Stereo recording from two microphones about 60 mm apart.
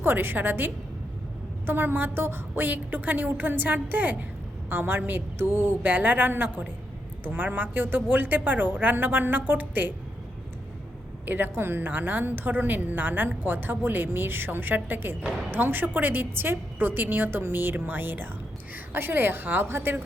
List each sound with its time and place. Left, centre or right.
0.0 s a woman's voice: right
11.3 s a woman's voice: right